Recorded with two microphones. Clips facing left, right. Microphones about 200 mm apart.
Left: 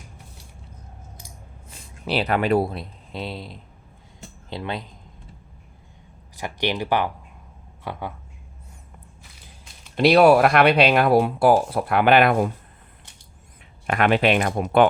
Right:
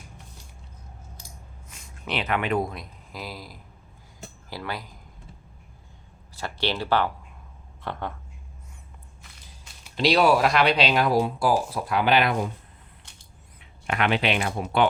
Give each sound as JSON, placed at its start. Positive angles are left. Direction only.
{"t": 1.7, "sound": "speech", "side_deg": 35}
{"t": 6.3, "sound": "speech", "side_deg": 15}
{"t": 9.9, "sound": "speech", "side_deg": 55}
{"t": 13.8, "sound": "speech", "side_deg": 45}